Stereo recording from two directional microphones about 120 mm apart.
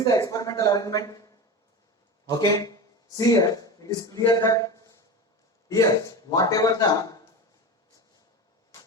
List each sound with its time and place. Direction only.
0.0 s a man's voice: 30° left (ahead or behind)